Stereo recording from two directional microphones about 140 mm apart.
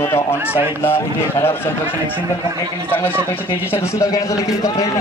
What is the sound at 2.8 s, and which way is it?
A man's voice, 15° left (ahead or behind).